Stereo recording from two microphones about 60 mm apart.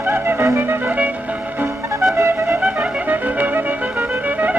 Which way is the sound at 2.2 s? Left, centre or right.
Right.